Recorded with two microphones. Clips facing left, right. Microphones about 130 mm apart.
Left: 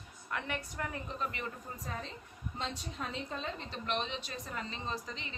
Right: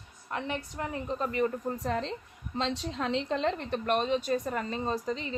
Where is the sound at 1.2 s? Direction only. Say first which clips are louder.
Right 11 dB; 40° right (ahead or behind).